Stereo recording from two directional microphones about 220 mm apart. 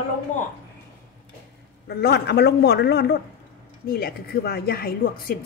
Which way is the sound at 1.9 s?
45° left (ahead or behind).